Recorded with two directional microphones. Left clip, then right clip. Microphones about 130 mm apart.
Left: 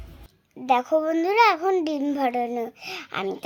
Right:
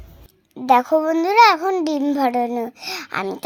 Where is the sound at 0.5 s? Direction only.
35° right (ahead or behind).